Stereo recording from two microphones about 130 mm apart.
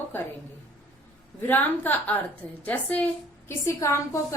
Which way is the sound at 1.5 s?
15° left (ahead or behind).